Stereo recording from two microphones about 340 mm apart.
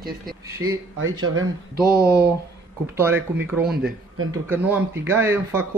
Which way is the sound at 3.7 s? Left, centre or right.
Right.